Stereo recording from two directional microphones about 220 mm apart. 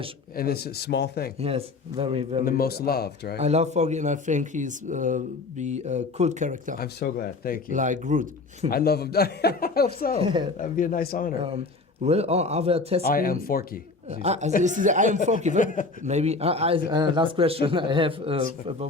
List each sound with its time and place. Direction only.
0.3 s a man's voice: 45° left (ahead or behind)
1.4 s a man's voice: 25° right (ahead or behind)
2.4 s a man's voice: 40° left (ahead or behind)
3.3 s speech: 30° right (ahead or behind)
6.7 s a man's voice: 45° left (ahead or behind)
7.7 s speech: 35° right (ahead or behind)
8.7 s a man's voice: 45° left (ahead or behind)
10.2 s a man's voice: 20° right (ahead or behind)
10.6 s speech: 35° left (ahead or behind)
11.3 s a man's voice: 25° right (ahead or behind)
13.1 s speech: 40° left (ahead or behind)
14.1 s a man's voice: 30° right (ahead or behind)
15.5 s speech: 35° left (ahead or behind)
16.0 s a man's voice: 30° right (ahead or behind)